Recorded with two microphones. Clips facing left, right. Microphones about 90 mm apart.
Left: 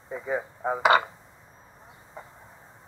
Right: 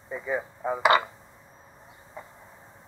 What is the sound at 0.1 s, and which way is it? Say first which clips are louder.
Radio: even; 45° left (ahead or behind).